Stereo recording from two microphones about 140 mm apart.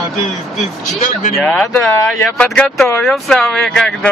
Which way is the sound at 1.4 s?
5° left (ahead or behind).